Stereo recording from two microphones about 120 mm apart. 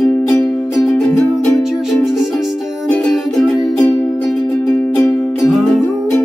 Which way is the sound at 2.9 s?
5° left (ahead or behind).